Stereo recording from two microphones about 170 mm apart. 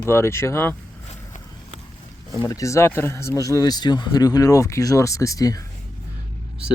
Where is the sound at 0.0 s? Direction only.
15° left (ahead or behind).